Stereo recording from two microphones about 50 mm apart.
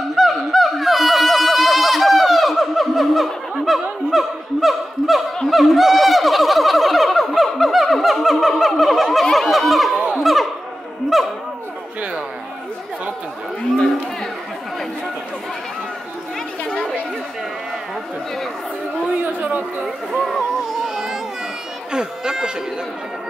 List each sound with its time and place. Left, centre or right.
0.1 s a sound: centre
11.1 s dog: centre
16.6 s chatter: centre
19.4 s chatter: right
20.1 s music: centre
20.9 s a sound: centre
21.9 s run: centre